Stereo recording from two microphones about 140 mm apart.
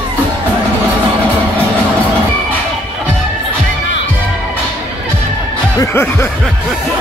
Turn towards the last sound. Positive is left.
turn(degrees=15)  # may be behind; listen again after turning